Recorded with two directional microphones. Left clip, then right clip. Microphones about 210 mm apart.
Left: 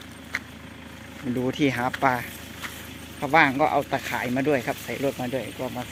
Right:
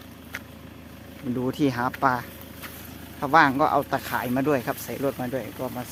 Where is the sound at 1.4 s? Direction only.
5° right (ahead or behind).